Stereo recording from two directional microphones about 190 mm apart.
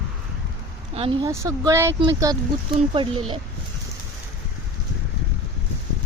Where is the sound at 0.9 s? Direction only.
30° right (ahead or behind).